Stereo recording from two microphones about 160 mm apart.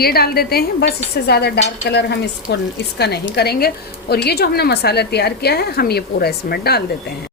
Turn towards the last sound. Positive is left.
turn(degrees=75)  # may be behind; listen again after turning